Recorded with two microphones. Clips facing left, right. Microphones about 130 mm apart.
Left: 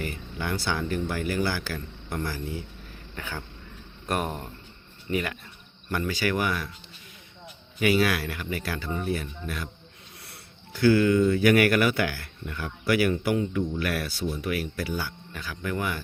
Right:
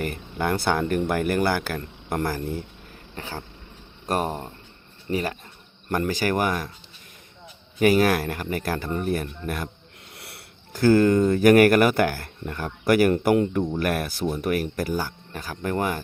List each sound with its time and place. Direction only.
0.0 s speech: 55° right (ahead or behind)
3.2 s speech: 35° right (ahead or behind)
7.8 s speech: 45° right (ahead or behind)
10.2 s wheeze: 70° right (ahead or behind)
10.7 s speech: 45° right (ahead or behind)